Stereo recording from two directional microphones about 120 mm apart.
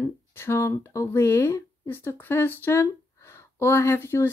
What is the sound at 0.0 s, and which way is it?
Speech, 20° left (ahead or behind).